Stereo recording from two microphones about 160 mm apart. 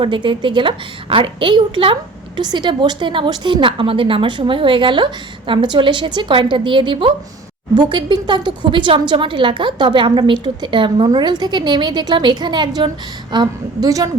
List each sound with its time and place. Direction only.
0.0 s a woman's voice: 30° right (ahead or behind)